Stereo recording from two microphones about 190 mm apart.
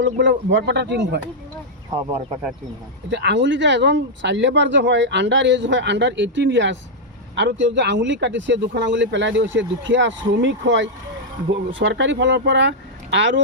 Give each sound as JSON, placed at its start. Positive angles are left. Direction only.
{"t": 0.0, "sound": "speech", "side_deg": -70}
{"t": 3.1, "sound": "speech", "side_deg": -65}